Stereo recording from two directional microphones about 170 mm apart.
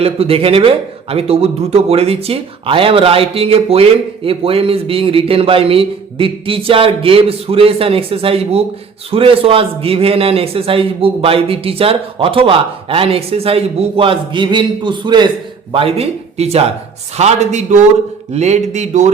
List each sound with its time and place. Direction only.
0.0 s a man's voice: 35° right (ahead or behind)